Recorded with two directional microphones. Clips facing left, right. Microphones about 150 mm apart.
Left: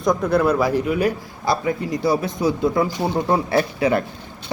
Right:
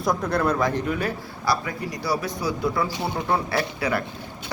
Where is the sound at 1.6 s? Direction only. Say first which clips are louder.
Left 7 dB; 25° left (ahead or behind).